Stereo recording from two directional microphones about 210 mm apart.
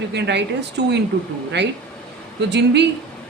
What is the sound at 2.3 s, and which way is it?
Speech, 55° right (ahead or behind).